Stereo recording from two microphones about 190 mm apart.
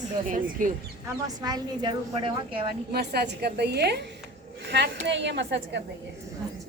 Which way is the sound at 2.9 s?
60° right (ahead or behind).